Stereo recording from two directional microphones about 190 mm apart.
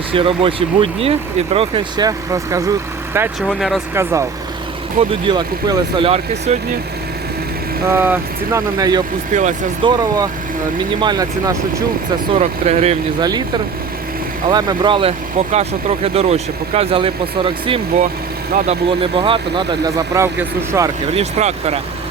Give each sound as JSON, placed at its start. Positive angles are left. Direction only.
{"t": 0.1, "sound": "speech", "side_deg": -30}
{"t": 3.4, "sound": "speech", "side_deg": 0}
{"t": 3.9, "sound": "speech", "side_deg": -15}
{"t": 7.9, "sound": "speech", "side_deg": -10}
{"t": 9.3, "sound": "speech", "side_deg": -40}
{"t": 9.8, "sound": "speech", "side_deg": -20}
{"t": 12.3, "sound": "speech", "side_deg": -35}
{"t": 13.1, "sound": "speech", "side_deg": -20}
{"t": 14.5, "sound": "speech", "side_deg": -20}
{"t": 21.1, "sound": "speech", "side_deg": -35}